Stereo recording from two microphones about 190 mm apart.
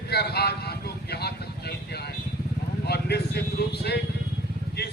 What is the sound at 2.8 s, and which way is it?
Vehicle, 60° left (ahead or behind).